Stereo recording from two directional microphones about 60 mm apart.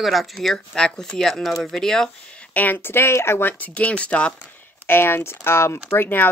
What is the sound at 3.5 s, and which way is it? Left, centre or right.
Speech, left.